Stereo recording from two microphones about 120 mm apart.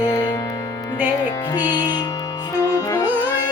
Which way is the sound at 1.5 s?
35° left (ahead or behind).